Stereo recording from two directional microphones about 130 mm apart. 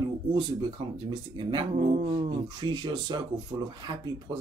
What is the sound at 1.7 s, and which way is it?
Speech, 60° right (ahead or behind).